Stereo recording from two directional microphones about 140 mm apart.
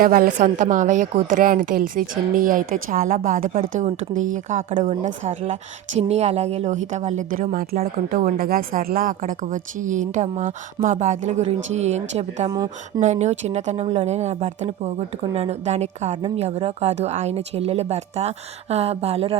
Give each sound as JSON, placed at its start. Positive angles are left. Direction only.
{"t": 0.0, "sound": "a woman's voice", "side_deg": -90}
{"t": 0.3, "sound": "a woman's voice", "side_deg": -65}
{"t": 6.0, "sound": "a woman's voice", "side_deg": -50}
{"t": 12.5, "sound": "speech", "side_deg": -25}
{"t": 13.0, "sound": "speech", "side_deg": -55}